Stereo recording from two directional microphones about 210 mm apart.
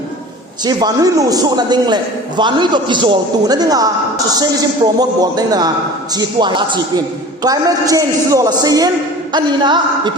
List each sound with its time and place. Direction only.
0.6 s a man's voice: 20° right (ahead or behind)
4.9 s a man's voice: 20° right (ahead or behind)